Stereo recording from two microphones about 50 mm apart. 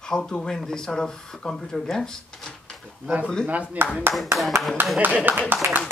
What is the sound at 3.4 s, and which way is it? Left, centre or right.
Speech, right.